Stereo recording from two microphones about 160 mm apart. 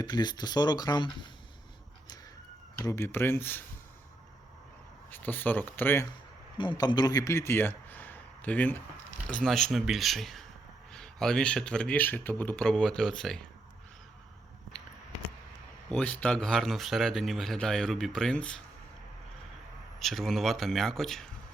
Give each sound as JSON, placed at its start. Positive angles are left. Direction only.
{"t": 0.0, "sound": "speech", "side_deg": 25}
{"t": 2.8, "sound": "speech", "side_deg": 15}
{"t": 5.1, "sound": "speech", "side_deg": 10}
{"t": 6.6, "sound": "a man's voice", "side_deg": 25}
{"t": 15.9, "sound": "speech", "side_deg": 5}
{"t": 20.0, "sound": "speech", "side_deg": 0}